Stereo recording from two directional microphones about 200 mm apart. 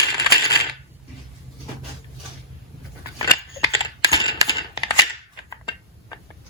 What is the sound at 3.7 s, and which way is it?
Typing, 15° left (ahead or behind).